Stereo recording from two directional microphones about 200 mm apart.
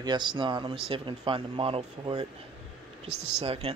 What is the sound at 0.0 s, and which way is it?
Speech, 20° right (ahead or behind).